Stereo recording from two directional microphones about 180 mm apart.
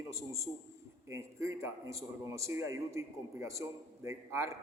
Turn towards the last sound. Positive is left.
turn(degrees=-15)  # may be behind; listen again after turning